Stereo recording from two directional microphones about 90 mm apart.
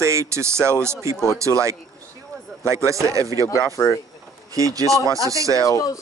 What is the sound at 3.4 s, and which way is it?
Speech, 35° left (ahead or behind).